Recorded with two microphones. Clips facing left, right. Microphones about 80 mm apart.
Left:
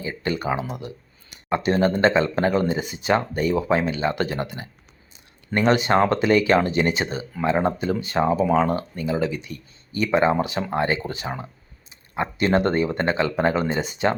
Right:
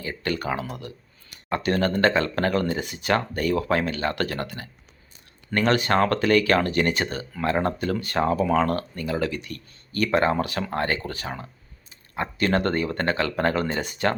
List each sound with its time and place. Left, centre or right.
0.0 s speech: centre